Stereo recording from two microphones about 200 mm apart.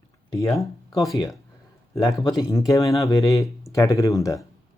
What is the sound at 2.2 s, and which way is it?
Speech, 15° left (ahead or behind).